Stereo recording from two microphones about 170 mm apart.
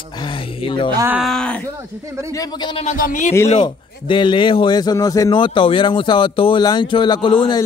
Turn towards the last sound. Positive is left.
turn(degrees=30)  # may be behind; listen again after turning